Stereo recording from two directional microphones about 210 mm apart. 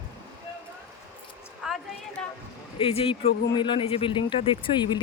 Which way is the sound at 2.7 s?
25° left (ahead or behind).